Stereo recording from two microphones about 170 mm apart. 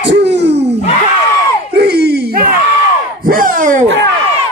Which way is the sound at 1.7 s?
75° right (ahead or behind).